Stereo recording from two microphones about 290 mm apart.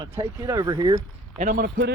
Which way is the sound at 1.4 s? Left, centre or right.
Right.